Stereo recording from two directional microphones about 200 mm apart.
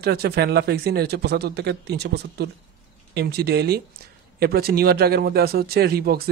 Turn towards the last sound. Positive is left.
turn(degrees=-50)  # may be behind; listen again after turning